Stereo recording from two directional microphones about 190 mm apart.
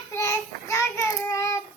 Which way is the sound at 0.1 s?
15° left (ahead or behind).